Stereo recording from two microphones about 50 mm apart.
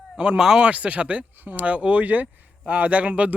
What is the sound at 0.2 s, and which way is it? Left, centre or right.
Speech, centre.